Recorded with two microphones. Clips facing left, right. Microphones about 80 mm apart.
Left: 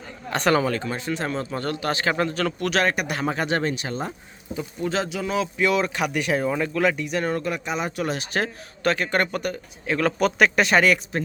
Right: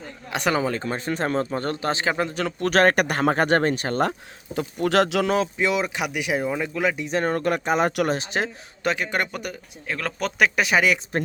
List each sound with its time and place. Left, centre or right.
0.3 s a man's voice: centre
0.8 s speech: right; by 2.5 s centre
2.6 s speech: right
4.5 s speech: right
5.5 s a man's voice: centre
7.0 s speech: right
8.0 s speech: right
8.3 s a man's voice: centre